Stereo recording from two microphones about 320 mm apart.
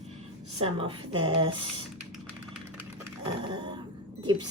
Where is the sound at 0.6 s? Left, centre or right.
Centre.